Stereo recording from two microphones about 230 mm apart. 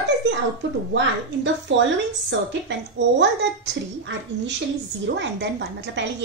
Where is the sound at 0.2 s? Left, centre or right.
Right.